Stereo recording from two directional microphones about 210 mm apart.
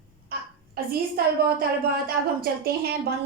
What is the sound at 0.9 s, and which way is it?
A woman's voice, 45° right (ahead or behind).